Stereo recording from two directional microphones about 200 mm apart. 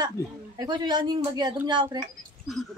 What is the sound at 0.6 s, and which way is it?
Speech, 20° right (ahead or behind).